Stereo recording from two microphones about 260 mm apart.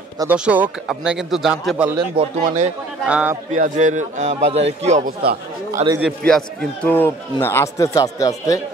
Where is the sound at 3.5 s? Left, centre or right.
Right.